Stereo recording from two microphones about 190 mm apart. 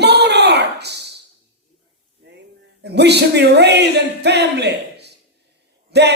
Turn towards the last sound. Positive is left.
turn(degrees=-60)  # may be behind; listen again after turning